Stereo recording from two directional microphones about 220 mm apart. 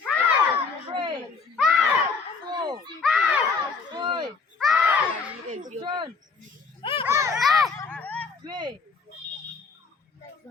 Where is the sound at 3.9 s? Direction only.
20° right (ahead or behind).